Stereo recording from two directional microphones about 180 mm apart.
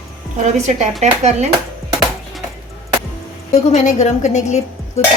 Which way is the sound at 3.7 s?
40° left (ahead or behind).